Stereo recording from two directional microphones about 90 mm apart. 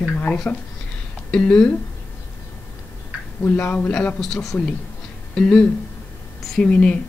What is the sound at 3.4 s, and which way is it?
Speech, 20° left (ahead or behind).